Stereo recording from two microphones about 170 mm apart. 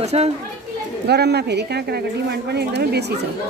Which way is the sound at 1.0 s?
75° right (ahead or behind).